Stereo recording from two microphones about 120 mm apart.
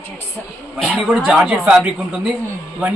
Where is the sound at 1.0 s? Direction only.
Centre (ahead or behind).